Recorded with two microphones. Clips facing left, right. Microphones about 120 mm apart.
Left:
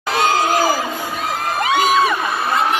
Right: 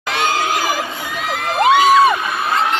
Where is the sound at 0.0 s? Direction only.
40° left (ahead or behind).